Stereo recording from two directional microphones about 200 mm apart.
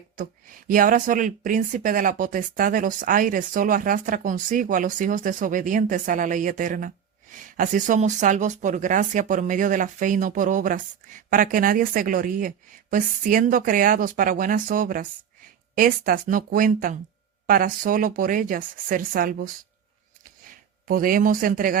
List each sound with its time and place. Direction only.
0.2 s speech: 40° right (ahead or behind)
20.8 s speech: 45° right (ahead or behind)